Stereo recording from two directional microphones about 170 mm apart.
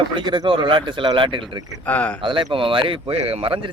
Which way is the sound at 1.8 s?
10° left (ahead or behind).